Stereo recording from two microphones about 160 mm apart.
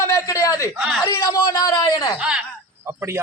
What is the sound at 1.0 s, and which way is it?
A man's voice, 20° left (ahead or behind).